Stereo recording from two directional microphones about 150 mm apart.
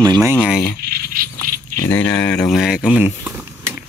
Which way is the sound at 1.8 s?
10° left (ahead or behind).